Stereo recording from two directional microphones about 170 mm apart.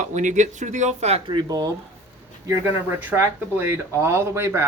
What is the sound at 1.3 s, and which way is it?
Speech, 25° right (ahead or behind).